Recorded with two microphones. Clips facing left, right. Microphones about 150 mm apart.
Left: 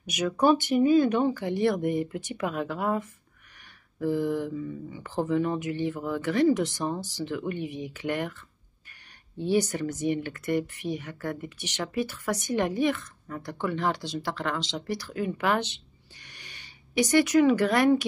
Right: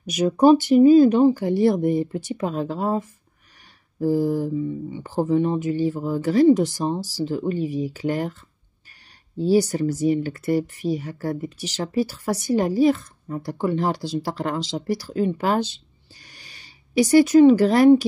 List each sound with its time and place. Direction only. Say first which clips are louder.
0.1 s speech: right 7 dB; 35° right (ahead or behind)